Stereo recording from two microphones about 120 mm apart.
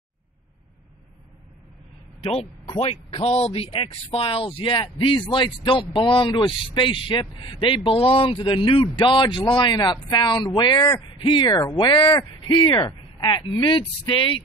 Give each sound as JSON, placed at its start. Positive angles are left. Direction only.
{"t": 2.8, "sound": "a man's voice", "side_deg": 55}